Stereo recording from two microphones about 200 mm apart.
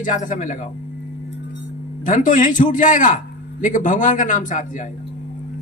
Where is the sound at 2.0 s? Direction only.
40° left (ahead or behind).